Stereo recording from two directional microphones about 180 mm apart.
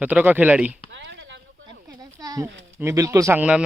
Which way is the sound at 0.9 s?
85° right.